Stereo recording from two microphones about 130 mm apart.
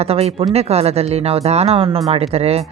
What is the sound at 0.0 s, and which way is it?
Speech, 50° right (ahead or behind).